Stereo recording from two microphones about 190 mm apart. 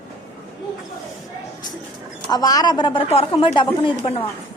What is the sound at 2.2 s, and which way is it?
A woman's voice, 20° left (ahead or behind).